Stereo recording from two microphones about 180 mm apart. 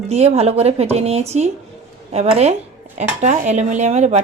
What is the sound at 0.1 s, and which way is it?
Speech, 35° right (ahead or behind).